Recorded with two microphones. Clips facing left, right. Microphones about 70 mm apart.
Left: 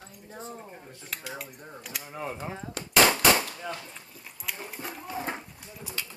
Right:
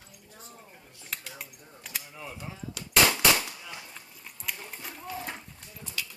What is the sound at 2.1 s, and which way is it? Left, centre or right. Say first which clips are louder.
Speech: left 7 dB; left.